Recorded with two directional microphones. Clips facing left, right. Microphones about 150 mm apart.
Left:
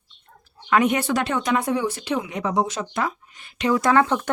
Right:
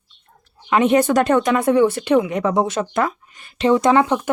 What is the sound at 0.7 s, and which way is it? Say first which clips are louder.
Speech: right 3 dB; 25° right (ahead or behind).